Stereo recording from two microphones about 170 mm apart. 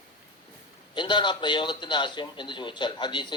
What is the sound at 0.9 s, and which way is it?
A man's voice, 25° left (ahead or behind).